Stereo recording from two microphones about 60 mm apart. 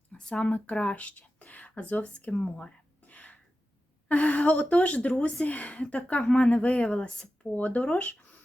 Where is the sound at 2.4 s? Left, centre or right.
Centre.